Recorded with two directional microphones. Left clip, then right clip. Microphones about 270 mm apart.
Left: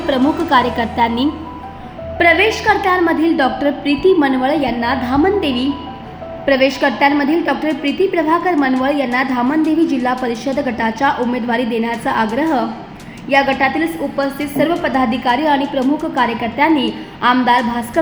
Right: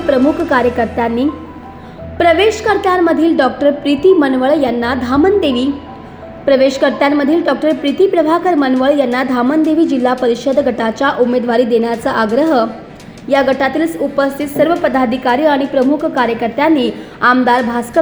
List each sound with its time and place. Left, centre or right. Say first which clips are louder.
0.1 s a woman's voice: right 2 dB; centre
2.1 s a woman's voice: right 2 dB; centre
6.4 s a woman's voice: right 3 dB; centre